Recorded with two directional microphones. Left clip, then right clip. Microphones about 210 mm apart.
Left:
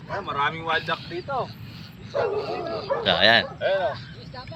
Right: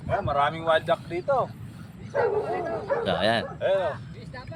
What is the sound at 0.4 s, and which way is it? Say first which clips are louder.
Speech: left 1 dB; 30° right (ahead or behind).